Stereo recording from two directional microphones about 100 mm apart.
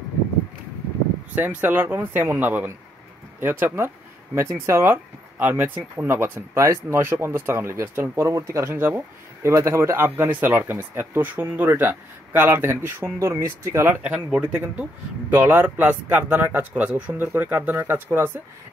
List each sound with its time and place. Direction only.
1.3 s speech: 20° right (ahead or behind)
14.0 s speech: 10° right (ahead or behind)